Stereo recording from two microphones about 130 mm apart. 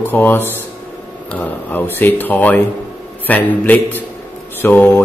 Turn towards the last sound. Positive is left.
turn(degrees=15)  # may be behind; listen again after turning